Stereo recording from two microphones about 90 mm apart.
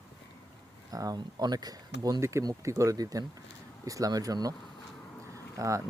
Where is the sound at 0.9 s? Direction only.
45° right (ahead or behind).